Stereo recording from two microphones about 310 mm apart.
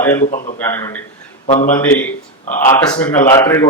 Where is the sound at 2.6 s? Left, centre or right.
Centre.